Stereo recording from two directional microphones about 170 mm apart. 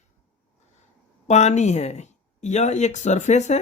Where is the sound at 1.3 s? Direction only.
40° left (ahead or behind).